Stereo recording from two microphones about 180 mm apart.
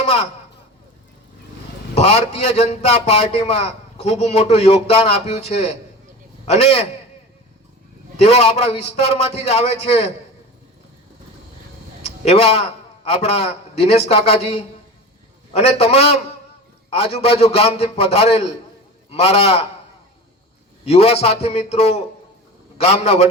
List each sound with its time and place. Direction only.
0.0 s a sound: 35° left (ahead or behind)
2.0 s a man's voice: 40° left (ahead or behind)
8.2 s a man's voice: 35° left (ahead or behind)
12.0 s a sound: 35° left (ahead or behind)
13.1 s a man's voice: 35° left (ahead or behind)
20.8 s a man's voice: 35° left (ahead or behind)